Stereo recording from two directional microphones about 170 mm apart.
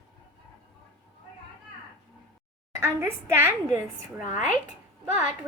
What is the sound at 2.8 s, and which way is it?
A woman's voice, 15° right (ahead or behind).